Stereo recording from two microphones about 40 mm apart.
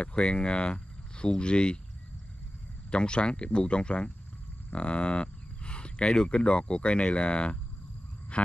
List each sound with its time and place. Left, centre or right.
0.0 s speech: left
2.9 s speech: left